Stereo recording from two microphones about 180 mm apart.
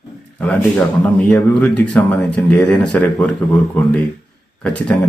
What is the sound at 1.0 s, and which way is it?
Speech, 10° left (ahead or behind).